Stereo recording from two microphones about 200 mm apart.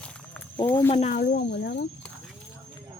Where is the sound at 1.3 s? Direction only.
60° left (ahead or behind).